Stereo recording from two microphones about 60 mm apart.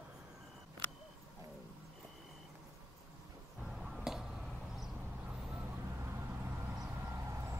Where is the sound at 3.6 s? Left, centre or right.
Centre.